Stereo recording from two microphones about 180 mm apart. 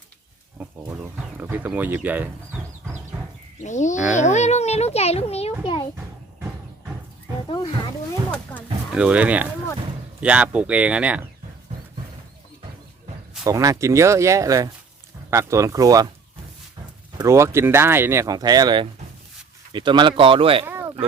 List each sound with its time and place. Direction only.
0.6 s bird: 10° right (ahead or behind)
3.6 s a child's voice: 45° left (ahead or behind)
5.6 s a sound: 25° left (ahead or behind)
8.9 s speech: 5° right (ahead or behind)
13.4 s speech: 20° right (ahead or behind)
17.2 s speech: 15° right (ahead or behind)
20.7 s a sound: 15° right (ahead or behind)